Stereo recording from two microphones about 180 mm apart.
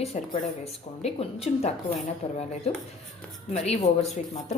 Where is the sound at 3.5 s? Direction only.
40° left (ahead or behind).